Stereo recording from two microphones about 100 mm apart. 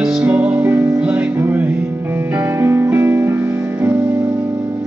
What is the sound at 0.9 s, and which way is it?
Music, 15° right (ahead or behind).